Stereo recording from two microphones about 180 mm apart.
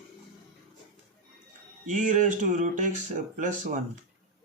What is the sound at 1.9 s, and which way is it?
Speech, 45° right (ahead or behind).